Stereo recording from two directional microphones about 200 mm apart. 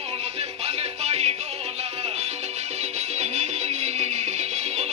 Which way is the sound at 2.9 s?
35° right (ahead or behind).